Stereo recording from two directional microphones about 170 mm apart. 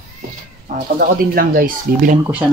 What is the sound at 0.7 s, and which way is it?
Speech, 55° right (ahead or behind).